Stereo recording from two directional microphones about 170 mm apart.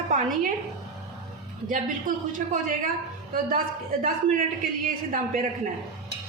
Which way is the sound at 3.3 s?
55° right (ahead or behind).